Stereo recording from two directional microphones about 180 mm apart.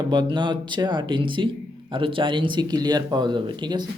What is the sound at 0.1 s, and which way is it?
Speech, 25° right (ahead or behind).